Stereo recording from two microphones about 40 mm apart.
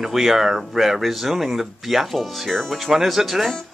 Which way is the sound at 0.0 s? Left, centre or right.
Centre.